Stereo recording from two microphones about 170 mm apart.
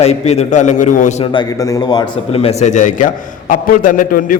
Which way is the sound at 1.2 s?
30° left (ahead or behind).